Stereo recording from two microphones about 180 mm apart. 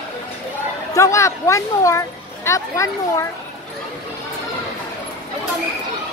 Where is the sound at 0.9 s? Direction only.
15° left (ahead or behind).